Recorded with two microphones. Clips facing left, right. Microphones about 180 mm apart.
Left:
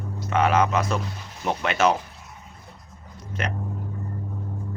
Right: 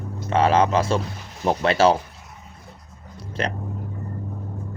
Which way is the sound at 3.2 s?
30° right (ahead or behind).